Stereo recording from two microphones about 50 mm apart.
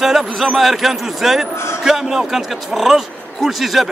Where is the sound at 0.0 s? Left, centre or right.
Centre.